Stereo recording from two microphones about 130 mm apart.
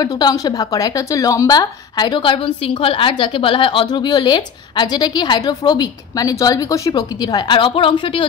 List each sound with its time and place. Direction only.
0.0 s a woman's voice: 30° left (ahead or behind)